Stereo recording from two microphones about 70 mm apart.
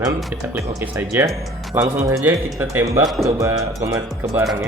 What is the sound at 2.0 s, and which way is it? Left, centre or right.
Speech, right.